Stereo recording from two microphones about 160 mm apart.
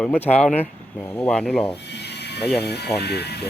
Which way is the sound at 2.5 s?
90° left.